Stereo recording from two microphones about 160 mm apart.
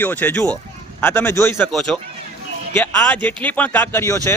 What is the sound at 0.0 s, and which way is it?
A man's voice, 10° left (ahead or behind).